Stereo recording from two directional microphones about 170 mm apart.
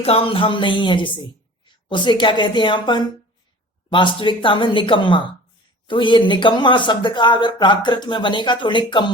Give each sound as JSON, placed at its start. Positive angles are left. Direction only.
{"t": 0.0, "sound": "a woman's voice", "side_deg": 35}